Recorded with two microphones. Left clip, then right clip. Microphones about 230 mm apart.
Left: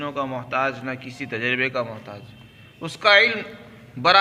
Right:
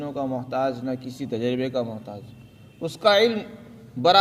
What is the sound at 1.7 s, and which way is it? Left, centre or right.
Speech, right.